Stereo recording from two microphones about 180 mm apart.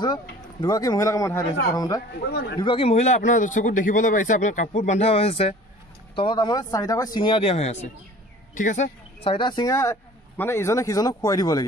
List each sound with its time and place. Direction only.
0.0 s speech: 25° left (ahead or behind)
2.2 s speech: 65° left (ahead or behind)
2.6 s a man's voice: 30° left (ahead or behind)